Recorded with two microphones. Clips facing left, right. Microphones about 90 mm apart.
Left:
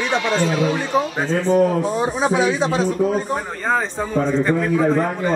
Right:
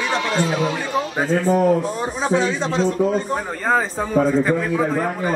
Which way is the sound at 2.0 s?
15° left (ahead or behind).